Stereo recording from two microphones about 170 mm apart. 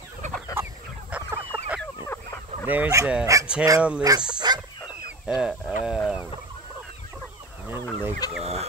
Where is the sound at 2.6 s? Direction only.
10° right (ahead or behind).